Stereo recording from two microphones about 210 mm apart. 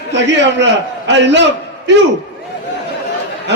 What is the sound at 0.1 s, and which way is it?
A man's voice, 55° right (ahead or behind).